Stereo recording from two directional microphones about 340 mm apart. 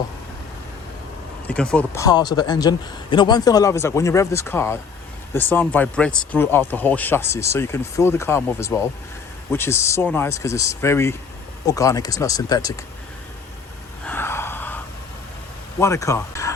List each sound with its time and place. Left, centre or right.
1.5 s speech: centre
14.1 s a sound: centre
15.8 s speech: centre